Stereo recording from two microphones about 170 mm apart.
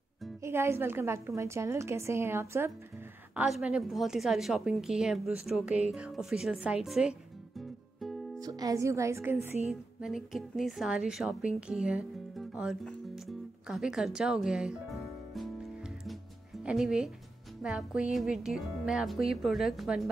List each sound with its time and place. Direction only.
0.4 s a woman's voice: 15° right (ahead or behind)
3.3 s speech: 5° right (ahead or behind)
8.4 s a woman's voice: 20° right (ahead or behind)
9.7 s a woman's voice: centre (ahead or behind)